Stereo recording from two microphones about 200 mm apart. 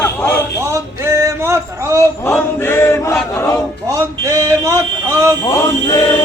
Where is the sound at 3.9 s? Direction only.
15° right (ahead or behind).